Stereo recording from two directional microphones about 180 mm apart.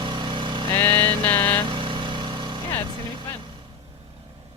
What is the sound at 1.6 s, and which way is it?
Vehicle, 25° right (ahead or behind).